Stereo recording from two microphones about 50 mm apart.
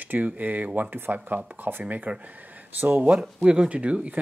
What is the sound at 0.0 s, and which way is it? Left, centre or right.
Speech, right.